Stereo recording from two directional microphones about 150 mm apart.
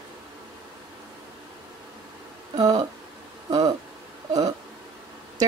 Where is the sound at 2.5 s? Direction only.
25° right (ahead or behind).